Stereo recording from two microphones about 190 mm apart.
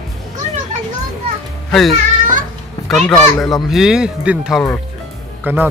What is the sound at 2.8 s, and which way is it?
A child's voice, 5° left (ahead or behind).